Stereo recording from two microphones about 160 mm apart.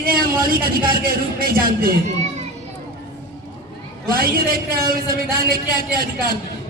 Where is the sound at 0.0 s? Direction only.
65° right (ahead or behind).